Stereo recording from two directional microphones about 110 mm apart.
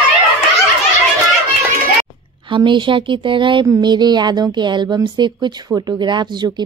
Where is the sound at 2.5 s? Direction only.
45° right (ahead or behind).